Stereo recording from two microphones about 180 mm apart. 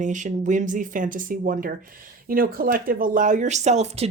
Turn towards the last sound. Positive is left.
turn(degrees=-35)  # may be behind; listen again after turning